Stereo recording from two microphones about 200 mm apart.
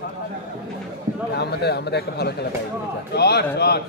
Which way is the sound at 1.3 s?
55° left (ahead or behind).